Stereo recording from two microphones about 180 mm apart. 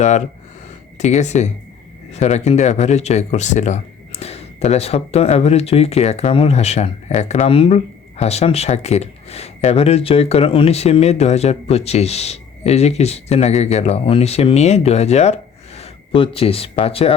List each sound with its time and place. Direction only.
0.9 s speech: 40° left (ahead or behind)